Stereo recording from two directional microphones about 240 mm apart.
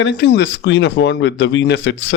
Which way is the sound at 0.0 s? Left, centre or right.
Left.